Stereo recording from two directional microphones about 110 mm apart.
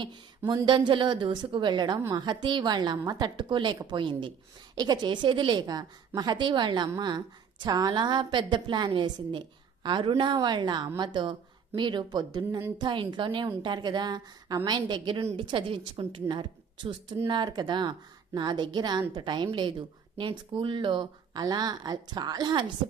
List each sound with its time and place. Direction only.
0.0 s a woman's voice: 40° right (ahead or behind)
2.0 s a woman's voice: 30° right (ahead or behind)
2.2 s a woman's voice: 45° right (ahead or behind)